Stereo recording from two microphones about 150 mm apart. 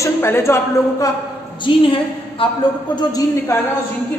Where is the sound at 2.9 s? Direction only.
25° left (ahead or behind).